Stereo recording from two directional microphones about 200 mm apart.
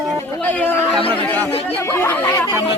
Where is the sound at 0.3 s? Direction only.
10° left (ahead or behind).